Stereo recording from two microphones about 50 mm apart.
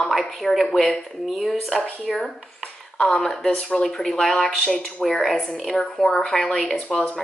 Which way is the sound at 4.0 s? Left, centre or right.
Centre.